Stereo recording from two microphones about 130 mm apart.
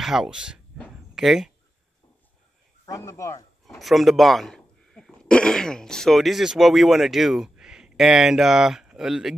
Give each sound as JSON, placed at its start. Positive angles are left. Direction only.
{"t": 0.0, "sound": "speech", "side_deg": -5}
{"t": 0.8, "sound": "a sound", "side_deg": -5}
{"t": 2.9, "sound": "speech", "side_deg": 20}
{"t": 3.6, "sound": "speech", "side_deg": 0}